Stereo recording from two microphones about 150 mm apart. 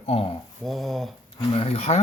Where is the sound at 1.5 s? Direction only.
45° left (ahead or behind).